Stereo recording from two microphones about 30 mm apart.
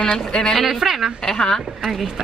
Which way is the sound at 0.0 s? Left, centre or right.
Left.